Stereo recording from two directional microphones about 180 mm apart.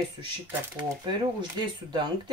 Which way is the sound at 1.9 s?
25° right (ahead or behind).